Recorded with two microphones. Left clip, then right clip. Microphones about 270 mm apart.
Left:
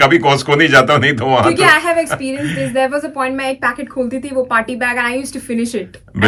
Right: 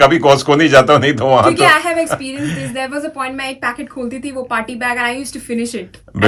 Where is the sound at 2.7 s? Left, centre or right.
Centre.